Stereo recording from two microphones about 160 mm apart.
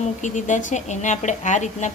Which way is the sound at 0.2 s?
50° left (ahead or behind).